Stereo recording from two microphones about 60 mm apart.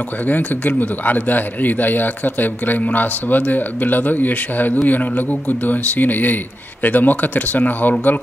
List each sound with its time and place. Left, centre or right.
0.3 s a man's voice: left